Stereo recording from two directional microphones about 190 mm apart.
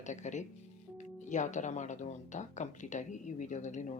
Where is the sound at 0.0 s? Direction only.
40° left (ahead or behind).